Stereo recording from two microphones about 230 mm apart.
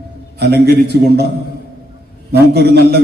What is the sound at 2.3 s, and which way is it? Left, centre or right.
Speech, right.